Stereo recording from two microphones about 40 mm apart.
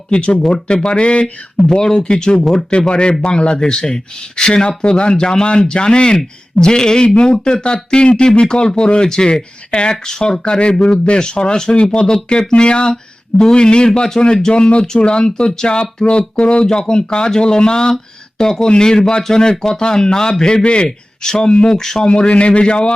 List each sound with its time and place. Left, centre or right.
0.1 s speech: left
21.8 s speech: centre
22.0 s speech: left